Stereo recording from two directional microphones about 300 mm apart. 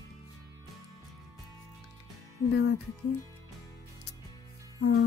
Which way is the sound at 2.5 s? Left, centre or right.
Left.